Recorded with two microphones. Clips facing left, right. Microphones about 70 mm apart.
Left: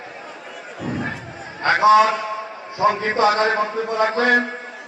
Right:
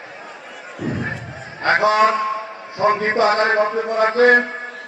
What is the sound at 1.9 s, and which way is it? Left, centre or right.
Speech, right.